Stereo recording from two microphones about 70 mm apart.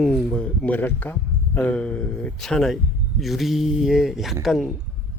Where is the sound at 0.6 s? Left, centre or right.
Left.